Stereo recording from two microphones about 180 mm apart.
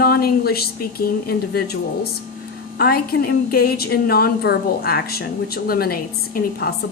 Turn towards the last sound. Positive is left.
turn(degrees=55)  # may be behind; listen again after turning